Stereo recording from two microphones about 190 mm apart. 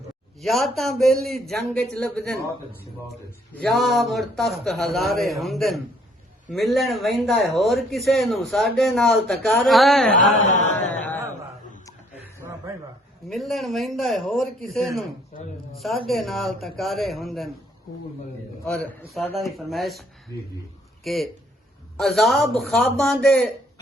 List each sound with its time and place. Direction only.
0.4 s speech: centre (ahead or behind)
10.4 s chant: 40° left (ahead or behind)
12.4 s a sound: 15° right (ahead or behind)
13.2 s speech: centre (ahead or behind)
16.0 s speech: centre (ahead or behind)
18.6 s speech: 5° left (ahead or behind)
20.3 s speech: 15° left (ahead or behind)
21.0 s speech: centre (ahead or behind)